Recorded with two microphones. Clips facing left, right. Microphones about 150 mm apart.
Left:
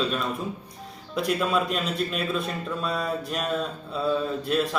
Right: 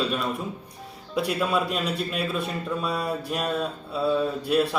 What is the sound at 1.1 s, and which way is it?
A man's voice, 5° right (ahead or behind).